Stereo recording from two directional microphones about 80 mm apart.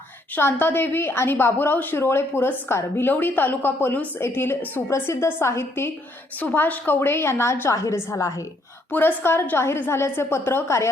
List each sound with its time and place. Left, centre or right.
0.3 s a woman's voice: left
6.4 s a woman's voice: left
8.9 s a woman's voice: left